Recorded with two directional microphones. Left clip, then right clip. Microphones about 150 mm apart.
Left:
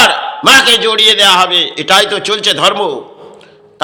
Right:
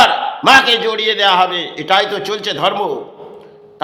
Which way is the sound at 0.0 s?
10° left (ahead or behind).